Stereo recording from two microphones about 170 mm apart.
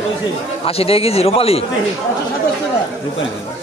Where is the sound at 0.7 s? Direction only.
35° left (ahead or behind).